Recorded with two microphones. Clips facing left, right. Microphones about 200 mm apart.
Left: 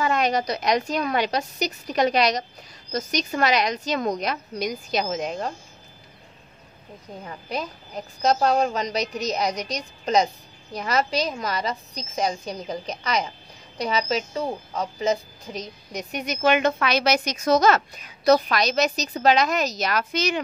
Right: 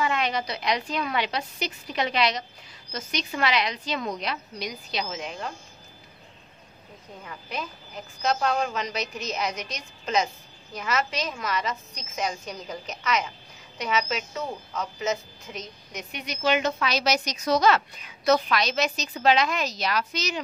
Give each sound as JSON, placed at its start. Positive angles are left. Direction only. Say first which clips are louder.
{"t": 0.0, "sound": "a woman's voice", "louder": "left 4 dB", "side_deg": 40}
{"t": 7.2, "sound": "a woman's voice", "louder": "left 4 dB", "side_deg": 40}